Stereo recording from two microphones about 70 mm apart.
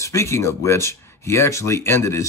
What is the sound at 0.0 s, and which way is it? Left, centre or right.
Speech, left.